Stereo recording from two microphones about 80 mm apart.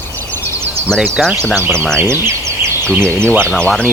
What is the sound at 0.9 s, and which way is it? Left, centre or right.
Speech, centre.